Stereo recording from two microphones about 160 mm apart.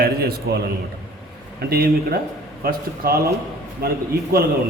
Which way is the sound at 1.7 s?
70° right (ahead or behind).